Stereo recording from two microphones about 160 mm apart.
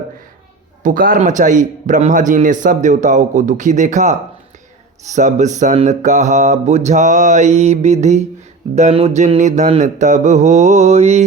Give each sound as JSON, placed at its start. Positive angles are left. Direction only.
{"t": 0.8, "sound": "a man's voice", "side_deg": -60}